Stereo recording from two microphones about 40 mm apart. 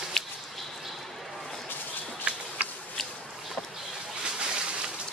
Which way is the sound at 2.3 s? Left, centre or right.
Right.